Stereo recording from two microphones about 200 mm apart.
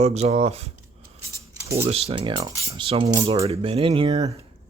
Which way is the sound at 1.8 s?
30° right (ahead or behind).